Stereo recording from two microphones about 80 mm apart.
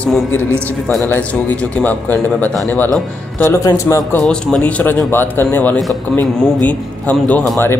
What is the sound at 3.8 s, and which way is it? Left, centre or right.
Speech, left.